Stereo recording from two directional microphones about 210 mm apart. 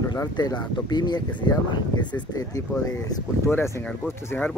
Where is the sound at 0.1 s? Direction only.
20° left (ahead or behind).